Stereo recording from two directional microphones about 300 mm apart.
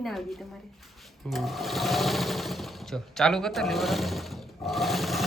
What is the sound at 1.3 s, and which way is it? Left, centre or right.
Sewing machine, centre.